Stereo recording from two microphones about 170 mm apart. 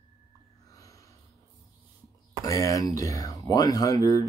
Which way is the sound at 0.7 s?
20° left (ahead or behind).